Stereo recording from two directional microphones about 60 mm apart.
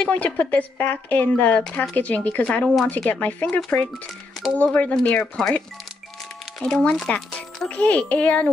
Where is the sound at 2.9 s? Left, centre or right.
Left.